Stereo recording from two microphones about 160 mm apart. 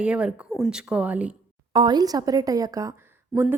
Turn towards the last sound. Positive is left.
turn(degrees=-15)  # may be behind; listen again after turning